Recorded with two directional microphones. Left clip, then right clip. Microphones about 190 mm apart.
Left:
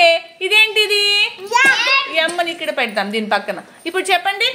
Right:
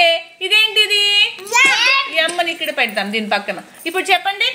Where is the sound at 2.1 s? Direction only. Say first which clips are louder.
Right 1 dB; centre (ahead or behind).